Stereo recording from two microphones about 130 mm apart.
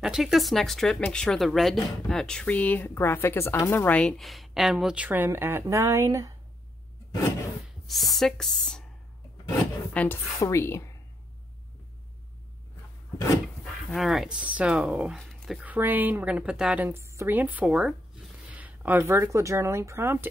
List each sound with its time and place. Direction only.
0.0 s speech: centre (ahead or behind); by 6.3 s 25° right (ahead or behind)
7.8 s speech: centre (ahead or behind)
9.9 s a woman's voice: 10° left (ahead or behind)
10.4 s a woman's voice: 20° left (ahead or behind)
13.8 s speech: centre (ahead or behind)
15.1 s dog: centre (ahead or behind)
15.6 s speech: 15° right (ahead or behind)
16.8 s speech: 20° right (ahead or behind)